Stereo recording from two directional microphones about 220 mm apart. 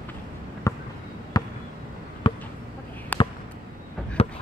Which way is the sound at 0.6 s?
15° left (ahead or behind).